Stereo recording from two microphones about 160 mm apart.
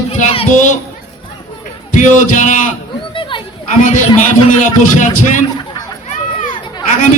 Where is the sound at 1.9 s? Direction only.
50° left (ahead or behind).